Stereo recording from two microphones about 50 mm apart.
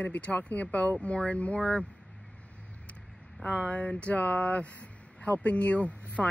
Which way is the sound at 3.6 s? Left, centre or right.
Left.